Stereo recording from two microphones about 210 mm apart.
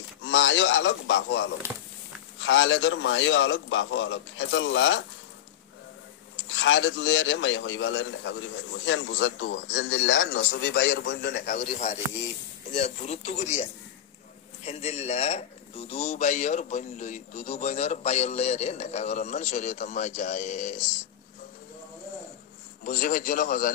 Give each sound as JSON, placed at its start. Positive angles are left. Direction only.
{"t": 0.2, "sound": "a man's voice", "side_deg": 65}
{"t": 6.5, "sound": "a man's voice", "side_deg": 60}
{"t": 11.3, "sound": "a man's voice", "side_deg": 40}
{"t": 22.8, "sound": "a man's voice", "side_deg": 40}